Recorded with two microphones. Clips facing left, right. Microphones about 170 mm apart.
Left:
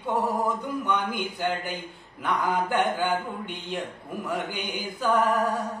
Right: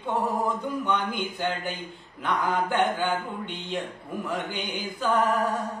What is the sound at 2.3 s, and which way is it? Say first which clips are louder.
A man's voice: even; 15° left (ahead or behind).